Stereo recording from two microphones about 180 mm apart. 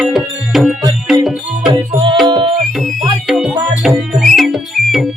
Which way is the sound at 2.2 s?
25° right (ahead or behind).